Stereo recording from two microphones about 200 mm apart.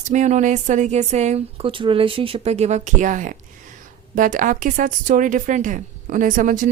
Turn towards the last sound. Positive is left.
turn(degrees=-40)  # may be behind; listen again after turning